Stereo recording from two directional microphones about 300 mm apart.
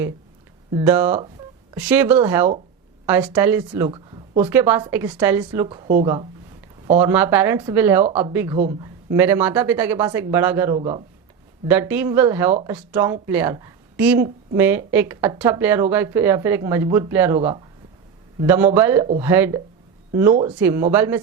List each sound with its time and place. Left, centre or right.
0.7 s a woman's voice: centre
7.0 s a woman's voice: centre
8.5 s speech: right
9.0 s a woman's voice: centre
11.7 s a woman's voice: centre